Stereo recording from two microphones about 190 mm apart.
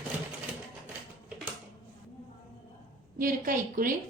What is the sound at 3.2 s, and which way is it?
Speech, 45° right (ahead or behind).